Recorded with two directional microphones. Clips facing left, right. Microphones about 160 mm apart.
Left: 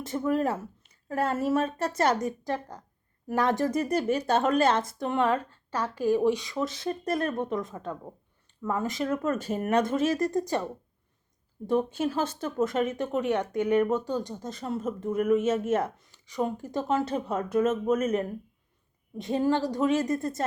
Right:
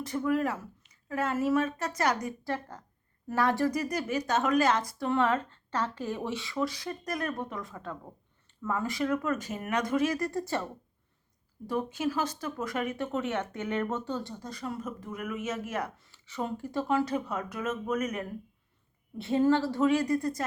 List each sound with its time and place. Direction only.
0.3 s speech: 30° left (ahead or behind)
19.1 s a woman's voice: 15° left (ahead or behind)